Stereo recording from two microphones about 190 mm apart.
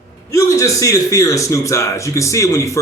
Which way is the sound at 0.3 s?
15° left (ahead or behind).